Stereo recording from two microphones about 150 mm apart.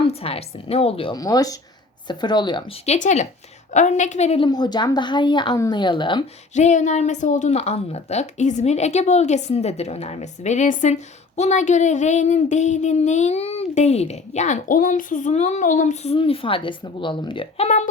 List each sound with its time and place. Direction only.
0.0 s a woman's voice: 40° left (ahead or behind)
1.1 s speech: 25° left (ahead or behind)
2.8 s speech: 50° left (ahead or behind)
4.4 s a woman's voice: 30° left (ahead or behind)
6.5 s speech: 50° left (ahead or behind)
16.1 s a woman's voice: 40° left (ahead or behind)